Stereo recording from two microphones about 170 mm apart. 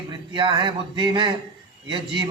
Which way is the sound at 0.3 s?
25° right (ahead or behind).